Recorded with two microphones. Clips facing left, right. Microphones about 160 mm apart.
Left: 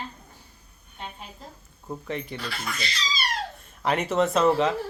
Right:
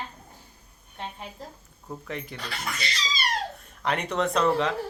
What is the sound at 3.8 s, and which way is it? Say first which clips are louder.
Speech: left 3 dB; 5° left (ahead or behind).